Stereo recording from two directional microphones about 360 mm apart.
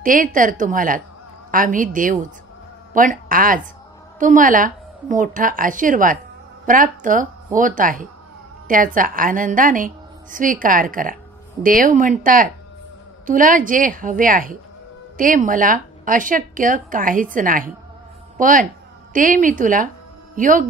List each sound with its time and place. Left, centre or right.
0.0 s speech: right